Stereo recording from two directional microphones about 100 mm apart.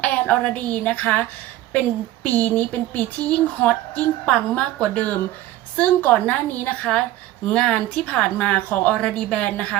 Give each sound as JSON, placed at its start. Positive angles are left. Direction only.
{"t": 0.0, "sound": "speech", "side_deg": 15}
{"t": 2.2, "sound": "speech", "side_deg": 15}